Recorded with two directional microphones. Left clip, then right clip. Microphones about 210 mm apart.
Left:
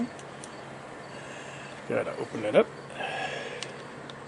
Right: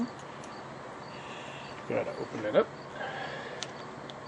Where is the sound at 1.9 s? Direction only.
15° left (ahead or behind).